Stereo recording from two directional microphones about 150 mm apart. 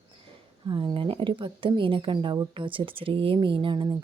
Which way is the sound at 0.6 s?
35° right (ahead or behind).